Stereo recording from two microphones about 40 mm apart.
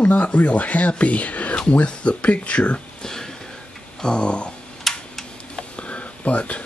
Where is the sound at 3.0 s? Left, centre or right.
Centre.